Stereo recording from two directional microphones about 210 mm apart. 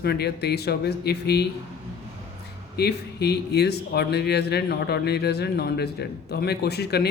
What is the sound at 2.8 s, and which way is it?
A man's voice, 50° left (ahead or behind).